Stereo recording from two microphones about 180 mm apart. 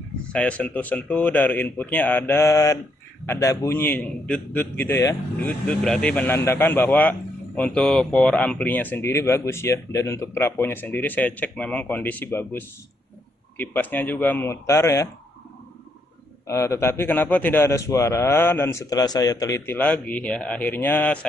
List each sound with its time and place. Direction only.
0.3 s a man's voice: 5° left (ahead or behind)
16.4 s a man's voice: 15° left (ahead or behind)